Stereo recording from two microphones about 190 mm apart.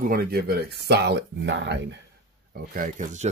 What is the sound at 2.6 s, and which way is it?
Speech, 45° right (ahead or behind).